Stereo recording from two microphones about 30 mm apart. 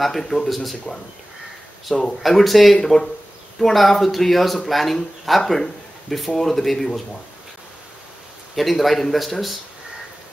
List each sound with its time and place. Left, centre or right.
0.0 s speech: centre
1.9 s speech: centre
2.2 s speech: centre
2.8 s speech: centre
3.7 s speech: centre
8.5 s speech: centre